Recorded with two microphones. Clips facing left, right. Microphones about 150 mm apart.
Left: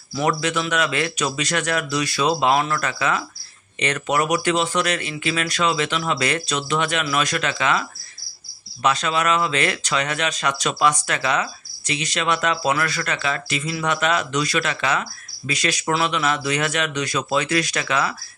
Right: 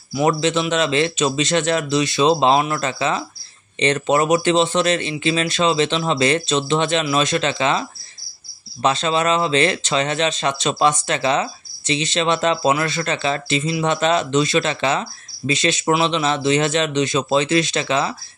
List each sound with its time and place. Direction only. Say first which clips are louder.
0.1 s speech: right 4 dB; 20° right (ahead or behind)